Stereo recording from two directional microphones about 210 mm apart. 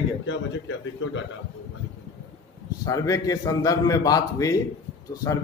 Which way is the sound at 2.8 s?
15° left (ahead or behind).